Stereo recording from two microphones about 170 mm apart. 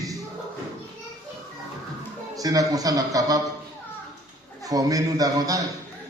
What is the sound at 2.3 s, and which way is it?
A man's voice, 20° right (ahead or behind).